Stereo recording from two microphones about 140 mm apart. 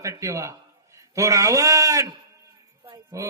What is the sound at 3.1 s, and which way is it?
Speech, 25° right (ahead or behind).